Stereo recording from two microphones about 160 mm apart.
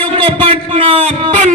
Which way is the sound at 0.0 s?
35° right (ahead or behind).